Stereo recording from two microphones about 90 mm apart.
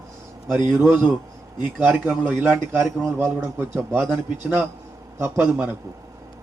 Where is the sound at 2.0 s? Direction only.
15° right (ahead or behind).